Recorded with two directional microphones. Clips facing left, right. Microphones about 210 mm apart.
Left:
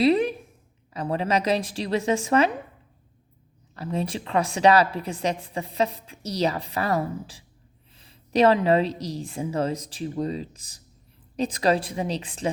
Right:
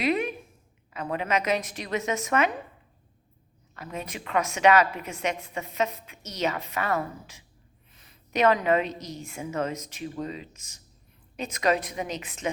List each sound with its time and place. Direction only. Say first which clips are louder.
0.0 s a woman's voice: left 6 dB; 30° left (ahead or behind)
3.8 s a woman's voice: left 8 dB; 30° left (ahead or behind)